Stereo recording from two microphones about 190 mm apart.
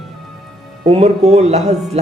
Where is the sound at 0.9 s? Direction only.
35° right (ahead or behind).